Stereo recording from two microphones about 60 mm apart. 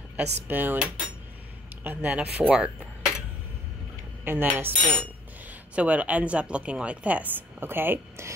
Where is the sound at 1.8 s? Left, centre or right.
Right.